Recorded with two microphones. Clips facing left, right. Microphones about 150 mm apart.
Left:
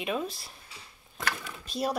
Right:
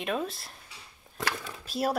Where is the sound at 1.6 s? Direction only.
5° right (ahead or behind).